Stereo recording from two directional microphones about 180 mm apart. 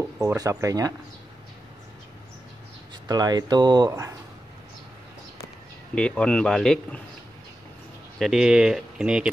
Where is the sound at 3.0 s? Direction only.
20° right (ahead or behind).